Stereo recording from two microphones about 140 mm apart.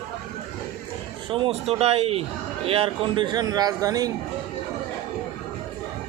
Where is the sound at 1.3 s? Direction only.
45° right (ahead or behind); by 4.1 s 25° right (ahead or behind).